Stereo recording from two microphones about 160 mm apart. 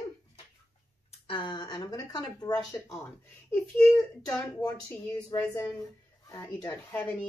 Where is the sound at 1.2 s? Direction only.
30° left (ahead or behind).